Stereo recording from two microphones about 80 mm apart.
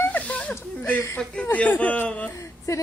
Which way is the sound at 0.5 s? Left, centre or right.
Left.